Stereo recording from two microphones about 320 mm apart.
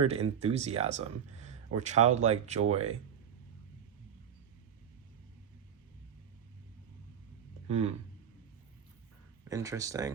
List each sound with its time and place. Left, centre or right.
0.0 s speech: centre
7.7 s speech: centre
9.4 s speech: centre